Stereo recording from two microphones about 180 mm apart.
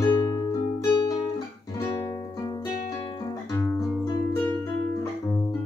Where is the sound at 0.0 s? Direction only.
20° left (ahead or behind).